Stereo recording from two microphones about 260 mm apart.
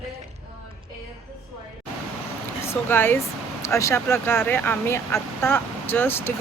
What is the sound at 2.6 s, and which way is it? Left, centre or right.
Speech, centre.